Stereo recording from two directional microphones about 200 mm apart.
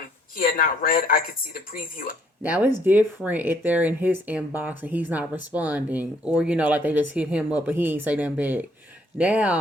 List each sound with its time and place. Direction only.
0.3 s speech: 45° left (ahead or behind)
2.4 s speech: 10° right (ahead or behind)